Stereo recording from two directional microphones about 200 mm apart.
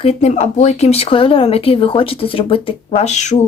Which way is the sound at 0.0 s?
30° left (ahead or behind).